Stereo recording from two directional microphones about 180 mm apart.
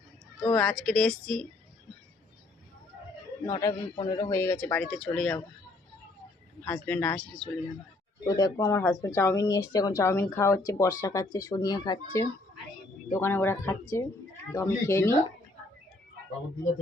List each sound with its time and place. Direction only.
0.5 s a woman's voice: 5° left (ahead or behind)
3.4 s a man's voice: 20° left (ahead or behind)
6.7 s a man's voice: 10° left (ahead or behind)
8.4 s a man's voice: 20° left (ahead or behind)